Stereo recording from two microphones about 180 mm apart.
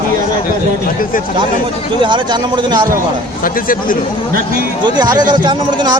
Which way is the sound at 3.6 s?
50° left (ahead or behind).